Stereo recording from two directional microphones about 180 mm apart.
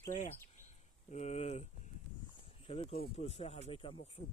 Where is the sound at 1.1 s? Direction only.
40° left (ahead or behind).